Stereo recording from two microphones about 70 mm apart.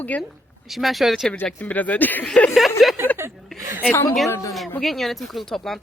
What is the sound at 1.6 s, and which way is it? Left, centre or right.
Speech, left.